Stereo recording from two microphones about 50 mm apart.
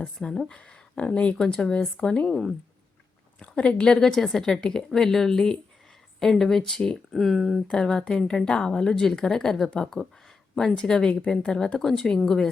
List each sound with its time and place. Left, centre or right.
0.2 s a woman's voice: centre
0.5 s speech: left
3.4 s a woman's voice: left; by 7.6 s centre
7.7 s a woman's voice: centre